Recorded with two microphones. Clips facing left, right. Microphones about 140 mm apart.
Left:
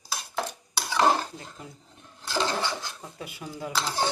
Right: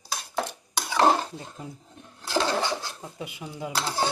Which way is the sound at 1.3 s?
30° right (ahead or behind).